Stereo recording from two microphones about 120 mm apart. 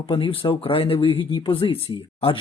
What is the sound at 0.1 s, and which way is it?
Speech, 45° left (ahead or behind).